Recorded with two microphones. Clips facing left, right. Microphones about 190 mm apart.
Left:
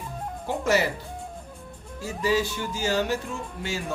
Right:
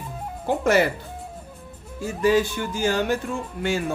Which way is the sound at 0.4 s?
55° right (ahead or behind).